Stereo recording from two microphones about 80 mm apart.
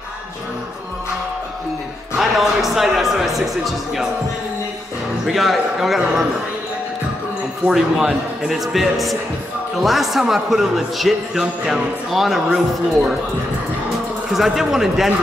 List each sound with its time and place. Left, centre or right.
2.1 s a man's voice: centre
5.2 s a man's voice: centre
7.6 s a man's voice: centre
14.3 s a man's voice: centre